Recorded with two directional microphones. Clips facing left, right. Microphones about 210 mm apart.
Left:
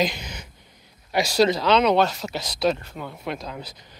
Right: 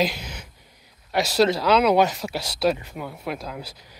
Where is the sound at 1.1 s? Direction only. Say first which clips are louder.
Even; centre (ahead or behind).